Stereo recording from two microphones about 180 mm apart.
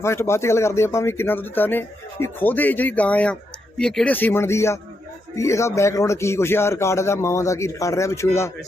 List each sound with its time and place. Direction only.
0.0 s speech: 15° left (ahead or behind)